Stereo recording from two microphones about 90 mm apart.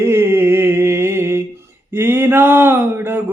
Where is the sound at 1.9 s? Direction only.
25° right (ahead or behind).